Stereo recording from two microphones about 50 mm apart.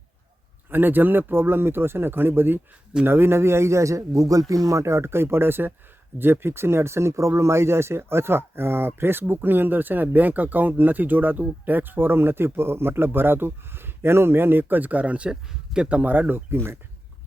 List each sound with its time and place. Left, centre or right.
0.7 s a man's voice: right
4.7 s a man's voice: right
15.3 s speech: centre
16.0 s speech: right